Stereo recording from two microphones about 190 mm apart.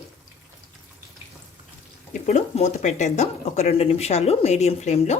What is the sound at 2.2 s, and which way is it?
Speech, 40° left (ahead or behind).